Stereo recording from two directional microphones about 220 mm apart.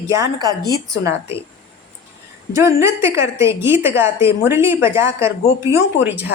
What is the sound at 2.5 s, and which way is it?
Speech, 10° right (ahead or behind).